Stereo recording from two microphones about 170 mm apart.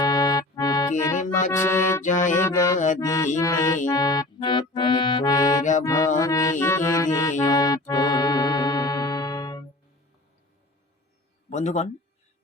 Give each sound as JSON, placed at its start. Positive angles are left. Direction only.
{"t": 0.0, "sound": "music", "side_deg": 25}
{"t": 2.0, "sound": "music", "side_deg": 50}
{"t": 2.3, "sound": "music", "side_deg": 15}
{"t": 2.7, "sound": "music", "side_deg": 45}
{"t": 3.0, "sound": "music", "side_deg": 20}
{"t": 3.8, "sound": "accordion", "side_deg": 25}
{"t": 5.8, "sound": "music", "side_deg": 20}
{"t": 7.4, "sound": "accordion", "side_deg": 20}
{"t": 11.4, "sound": "speech", "side_deg": 40}